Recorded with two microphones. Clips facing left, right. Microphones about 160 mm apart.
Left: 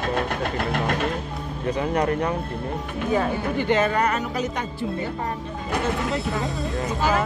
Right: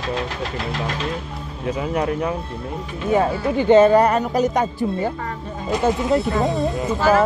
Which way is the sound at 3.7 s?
30° right (ahead or behind).